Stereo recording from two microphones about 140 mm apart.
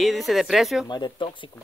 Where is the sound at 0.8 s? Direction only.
30° left (ahead or behind).